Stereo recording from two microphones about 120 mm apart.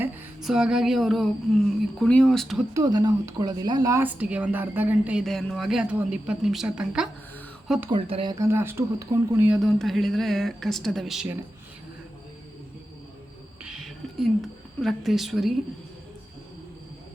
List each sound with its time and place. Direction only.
0.4 s speech: 5° right (ahead or behind)
2.7 s speech: 30° right (ahead or behind)
4.0 s a woman's voice: 10° right (ahead or behind)
5.2 s speech: 5° left (ahead or behind)
7.9 s speech: 45° right (ahead or behind)
8.3 s speech: 25° right (ahead or behind)
9.6 s speech: centre (ahead or behind)
13.7 s speech: centre (ahead or behind)